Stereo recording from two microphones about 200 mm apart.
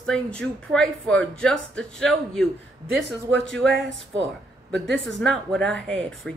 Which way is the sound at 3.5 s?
Centre (ahead or behind).